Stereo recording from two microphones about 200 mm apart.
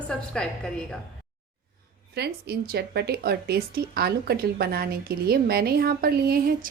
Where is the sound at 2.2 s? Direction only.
55° right (ahead or behind).